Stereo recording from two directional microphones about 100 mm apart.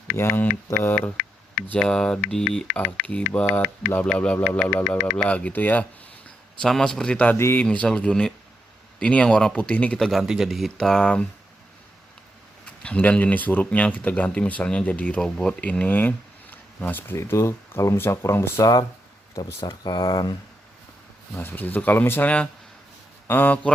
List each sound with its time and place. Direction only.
0.2 s speech: 20° left (ahead or behind)
5.0 s speech: 10° left (ahead or behind)
6.6 s speech: 5° left (ahead or behind)
7.3 s speech: 25° left (ahead or behind)
7.6 s speech: 10° left (ahead or behind)
10.0 s speech: centre (ahead or behind)
12.6 s speech: 10° left (ahead or behind); by 18.7 s 30° left (ahead or behind)
19.6 s speech: 45° left (ahead or behind)
21.3 s speech: 20° left (ahead or behind)